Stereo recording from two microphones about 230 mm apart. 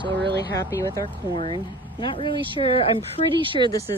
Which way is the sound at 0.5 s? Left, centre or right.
Centre.